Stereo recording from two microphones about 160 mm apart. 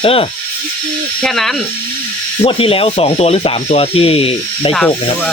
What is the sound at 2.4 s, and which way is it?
Speech, 35° left (ahead or behind).